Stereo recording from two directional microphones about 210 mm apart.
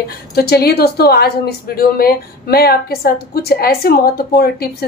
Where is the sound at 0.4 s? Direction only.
50° left (ahead or behind).